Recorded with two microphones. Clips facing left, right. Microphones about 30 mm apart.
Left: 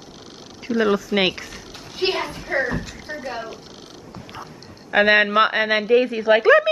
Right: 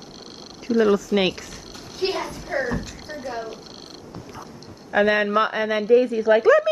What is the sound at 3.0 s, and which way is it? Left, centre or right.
Speech, left.